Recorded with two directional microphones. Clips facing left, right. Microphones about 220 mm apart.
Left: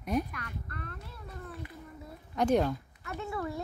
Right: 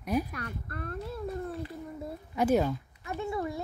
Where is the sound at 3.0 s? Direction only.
15° right (ahead or behind).